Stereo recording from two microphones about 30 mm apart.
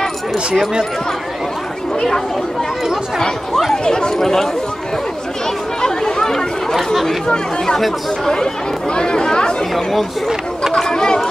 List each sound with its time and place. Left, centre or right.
3.2 s speech: centre
4.2 s speech: centre
5.8 s chatter: left
8.9 s speech: left
9.8 s speech: centre
10.9 s speech: left